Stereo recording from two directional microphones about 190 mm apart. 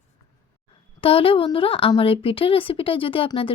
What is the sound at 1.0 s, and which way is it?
A woman's voice, 30° left (ahead or behind).